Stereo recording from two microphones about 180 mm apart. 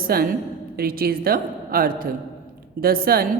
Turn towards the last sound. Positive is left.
turn(degrees=-55)  # may be behind; listen again after turning